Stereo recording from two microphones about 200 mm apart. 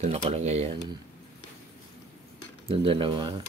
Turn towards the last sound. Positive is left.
turn(degrees=-25)  # may be behind; listen again after turning